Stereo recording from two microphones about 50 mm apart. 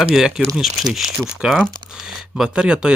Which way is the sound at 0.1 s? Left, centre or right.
Centre.